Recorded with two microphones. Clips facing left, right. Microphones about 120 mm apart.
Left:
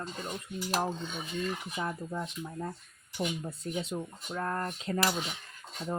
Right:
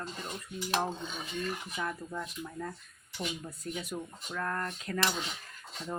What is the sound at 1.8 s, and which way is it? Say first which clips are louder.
Cutlery: left 2 dB; 25° left (ahead or behind).